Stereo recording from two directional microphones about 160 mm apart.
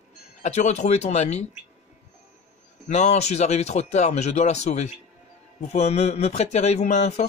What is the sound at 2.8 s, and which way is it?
Speech, 45° left (ahead or behind).